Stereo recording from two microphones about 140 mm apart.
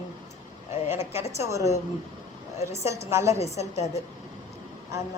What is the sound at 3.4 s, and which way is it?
Speech, 50° left (ahead or behind).